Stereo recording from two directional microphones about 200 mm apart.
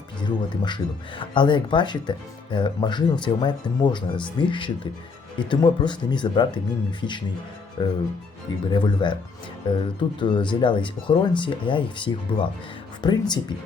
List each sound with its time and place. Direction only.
0.3 s speech: 20° left (ahead or behind)